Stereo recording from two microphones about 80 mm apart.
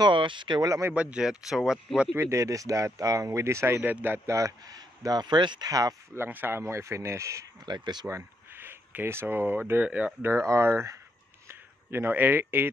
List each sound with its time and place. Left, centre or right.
0.0 s speech: right
0.6 s speech: right
0.9 s speech: centre
2.1 s speech: right
4.3 s speech: right
5.7 s speech: right
6.1 s speech: right
7.6 s speech: right
8.5 s speech: right
10.4 s speech: right